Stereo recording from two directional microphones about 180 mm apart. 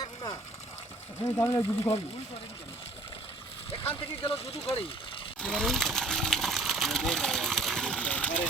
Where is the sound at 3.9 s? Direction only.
30° left (ahead or behind).